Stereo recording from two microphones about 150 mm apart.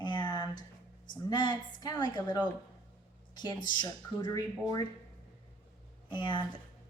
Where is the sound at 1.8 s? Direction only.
25° left (ahead or behind).